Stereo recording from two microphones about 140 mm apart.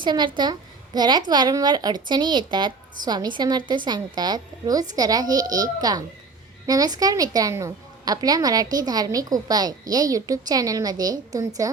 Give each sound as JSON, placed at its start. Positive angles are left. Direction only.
{"t": 0.0, "sound": "a woman's voice", "side_deg": -35}